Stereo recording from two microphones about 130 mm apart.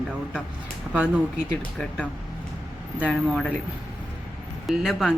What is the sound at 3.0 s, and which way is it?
Speech, 5° left (ahead or behind).